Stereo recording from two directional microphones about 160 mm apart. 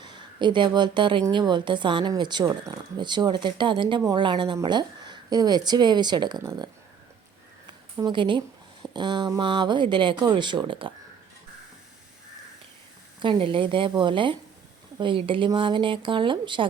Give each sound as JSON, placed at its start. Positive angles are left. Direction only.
{"t": 0.0, "sound": "a woman's voice", "side_deg": -30}
{"t": 7.9, "sound": "a woman's voice", "side_deg": -25}
{"t": 13.2, "sound": "speech", "side_deg": -30}